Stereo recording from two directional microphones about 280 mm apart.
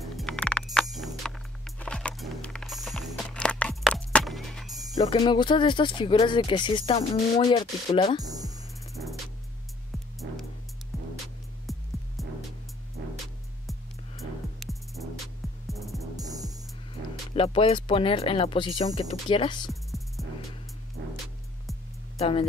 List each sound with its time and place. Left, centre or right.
0.1 s music: centre
4.9 s speech: centre
8.2 s music: centre
11.7 s music: centre
13.0 s music: right
14.6 s music: centre
16.2 s music: centre
17.3 s speech: centre
19.7 s music: centre
22.2 s speech: centre